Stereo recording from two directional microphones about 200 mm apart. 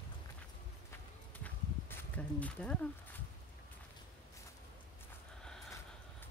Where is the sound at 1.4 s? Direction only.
5° left (ahead or behind).